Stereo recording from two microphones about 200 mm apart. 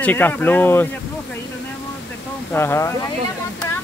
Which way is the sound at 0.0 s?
10° left (ahead or behind).